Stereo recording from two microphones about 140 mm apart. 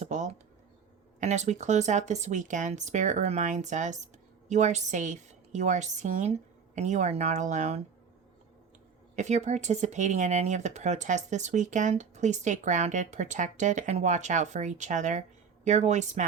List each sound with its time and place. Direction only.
0.0 s speech: 60° right (ahead or behind)
9.1 s speech: 55° right (ahead or behind)